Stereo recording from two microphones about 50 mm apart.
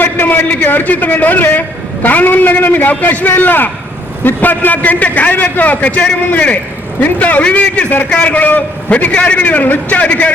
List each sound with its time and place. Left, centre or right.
0.0 s a man's voice: left